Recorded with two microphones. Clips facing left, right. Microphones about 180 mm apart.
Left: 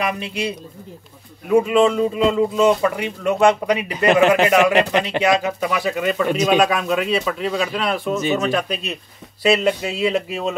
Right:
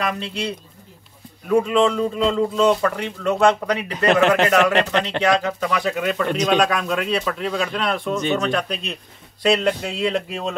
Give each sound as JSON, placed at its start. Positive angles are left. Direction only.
{"t": 0.0, "sound": "a man's voice", "side_deg": 10}